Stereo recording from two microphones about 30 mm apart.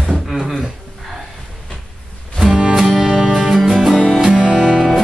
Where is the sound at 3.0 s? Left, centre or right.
Centre.